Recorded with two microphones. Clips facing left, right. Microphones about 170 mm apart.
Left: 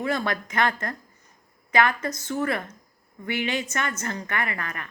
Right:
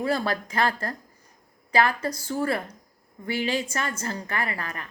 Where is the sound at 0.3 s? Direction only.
30° right (ahead or behind).